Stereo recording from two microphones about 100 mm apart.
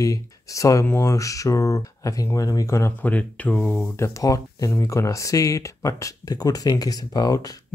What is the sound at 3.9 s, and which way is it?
Speech, 30° left (ahead or behind).